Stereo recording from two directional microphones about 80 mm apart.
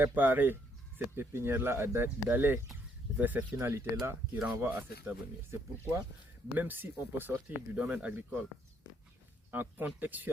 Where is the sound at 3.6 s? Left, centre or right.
Right.